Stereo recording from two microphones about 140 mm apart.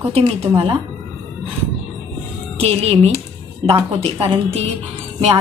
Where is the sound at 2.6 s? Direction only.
45° right (ahead or behind).